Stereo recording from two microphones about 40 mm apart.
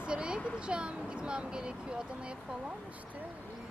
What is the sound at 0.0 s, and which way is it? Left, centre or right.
Speech, right.